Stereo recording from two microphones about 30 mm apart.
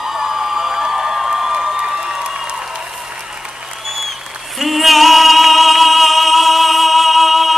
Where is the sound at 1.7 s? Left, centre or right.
Right.